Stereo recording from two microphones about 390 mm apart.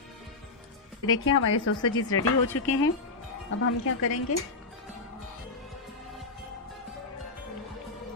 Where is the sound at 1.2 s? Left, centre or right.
Left.